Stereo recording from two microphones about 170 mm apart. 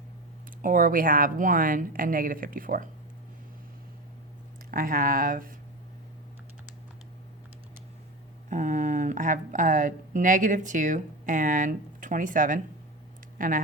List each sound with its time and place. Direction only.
0.6 s speech: 55° right (ahead or behind)
4.7 s speech: 55° right (ahead or behind)
8.4 s speech: 45° right (ahead or behind)